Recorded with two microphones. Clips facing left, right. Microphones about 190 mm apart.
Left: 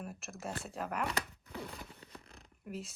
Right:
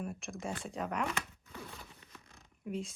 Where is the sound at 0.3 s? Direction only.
5° left (ahead or behind).